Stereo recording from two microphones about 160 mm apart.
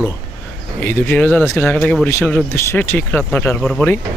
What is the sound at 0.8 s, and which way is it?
Speech, 10° left (ahead or behind).